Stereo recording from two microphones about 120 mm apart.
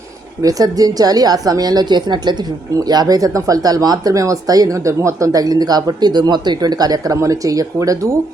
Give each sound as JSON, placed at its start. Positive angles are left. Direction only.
{"t": 0.4, "sound": "speech", "side_deg": -30}